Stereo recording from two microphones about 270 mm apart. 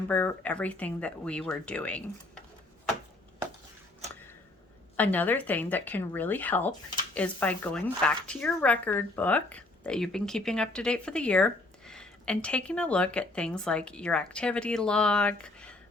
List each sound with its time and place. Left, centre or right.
0.1 s a woman's voice: centre
4.9 s a woman's voice: centre